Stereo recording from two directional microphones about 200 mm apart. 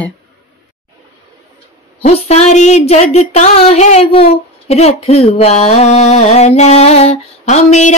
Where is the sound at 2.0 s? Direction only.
30° left (ahead or behind).